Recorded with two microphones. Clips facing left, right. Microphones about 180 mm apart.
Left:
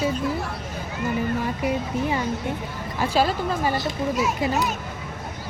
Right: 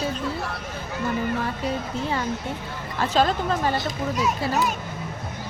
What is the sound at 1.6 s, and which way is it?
Speech, 15° left (ahead or behind).